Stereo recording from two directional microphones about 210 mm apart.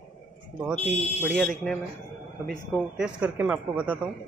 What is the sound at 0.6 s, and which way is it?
Speech, 10° right (ahead or behind).